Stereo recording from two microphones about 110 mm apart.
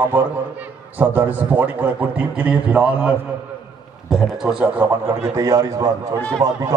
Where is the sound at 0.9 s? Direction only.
15° right (ahead or behind).